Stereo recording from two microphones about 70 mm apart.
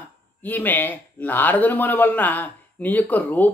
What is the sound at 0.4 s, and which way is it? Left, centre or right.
Speech, left.